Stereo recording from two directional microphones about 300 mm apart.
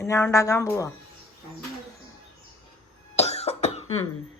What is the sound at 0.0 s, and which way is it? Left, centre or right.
Speech, centre.